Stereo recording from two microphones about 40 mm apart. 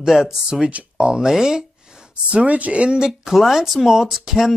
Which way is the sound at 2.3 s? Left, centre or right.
Right.